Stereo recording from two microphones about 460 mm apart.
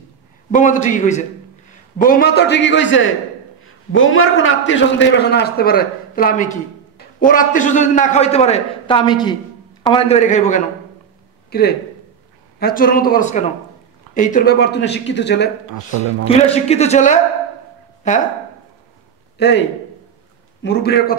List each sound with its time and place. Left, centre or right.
0.5 s a man's voice: centre
19.3 s a man's voice: left
20.6 s speech: left